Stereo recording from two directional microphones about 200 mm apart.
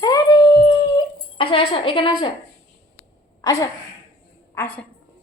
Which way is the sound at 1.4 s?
25° left (ahead or behind).